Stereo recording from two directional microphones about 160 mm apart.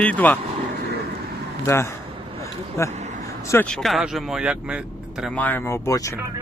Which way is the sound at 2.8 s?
45° right (ahead or behind).